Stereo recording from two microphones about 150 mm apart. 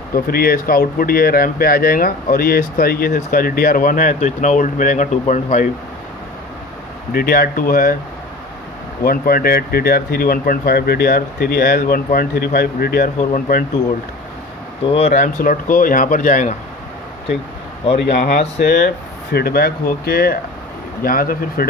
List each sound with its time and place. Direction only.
0.1 s speech: 85° left; by 5.7 s 55° left (ahead or behind)
7.1 s speech: 75° left (ahead or behind)
9.0 s speech: 75° left (ahead or behind)
14.9 s speech: 45° left (ahead or behind)
15.2 s speech: 65° left (ahead or behind)
17.8 s speech: 50° left (ahead or behind)
19.3 s speech: 90° left
21.0 s speech: 70° left (ahead or behind)